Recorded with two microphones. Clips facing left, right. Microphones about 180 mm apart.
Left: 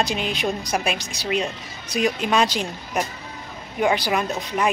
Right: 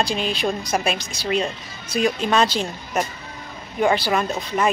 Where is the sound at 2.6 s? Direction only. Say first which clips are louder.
Right 2 dB; centre (ahead or behind).